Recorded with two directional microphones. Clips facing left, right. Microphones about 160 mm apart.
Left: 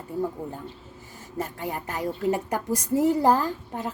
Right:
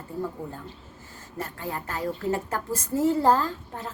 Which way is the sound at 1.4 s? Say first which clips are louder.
Left 2 dB; 15° left (ahead or behind).